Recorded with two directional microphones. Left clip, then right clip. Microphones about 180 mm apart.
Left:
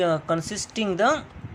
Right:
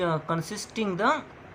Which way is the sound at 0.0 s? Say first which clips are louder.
Left 5 dB; 25° left (ahead or behind).